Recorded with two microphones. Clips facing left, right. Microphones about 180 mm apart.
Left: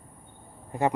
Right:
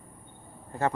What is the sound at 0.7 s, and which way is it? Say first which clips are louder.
Speech: left 2 dB; 15° left (ahead or behind).